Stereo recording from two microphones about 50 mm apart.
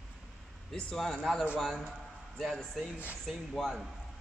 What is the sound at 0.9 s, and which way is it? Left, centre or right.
A man's voice, centre.